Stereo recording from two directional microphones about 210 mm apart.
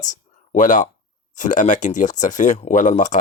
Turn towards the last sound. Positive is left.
turn(degrees=35)  # may be behind; listen again after turning